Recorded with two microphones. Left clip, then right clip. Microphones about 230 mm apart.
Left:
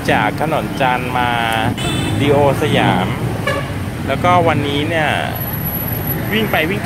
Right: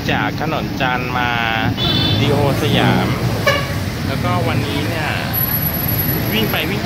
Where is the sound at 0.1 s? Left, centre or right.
Centre.